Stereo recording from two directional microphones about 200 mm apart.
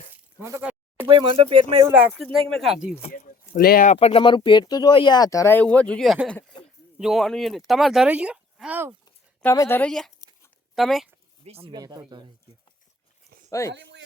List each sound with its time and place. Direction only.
0.1 s a sound: 10° right (ahead or behind)
1.0 s speech: 25° right (ahead or behind)
1.8 s speech: 10° right (ahead or behind)
3.1 s speech: 40° left (ahead or behind)
3.9 s speech: 30° left (ahead or behind); by 8.9 s 5° right (ahead or behind)
9.4 s a woman's voice: 10° left (ahead or behind)
11.4 s speech: 30° right (ahead or behind)
13.5 s speech: 15° left (ahead or behind)
13.7 s speech: 65° right (ahead or behind)